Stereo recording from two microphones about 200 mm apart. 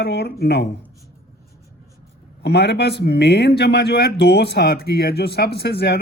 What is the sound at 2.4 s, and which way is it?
A man's voice, 55° left (ahead or behind).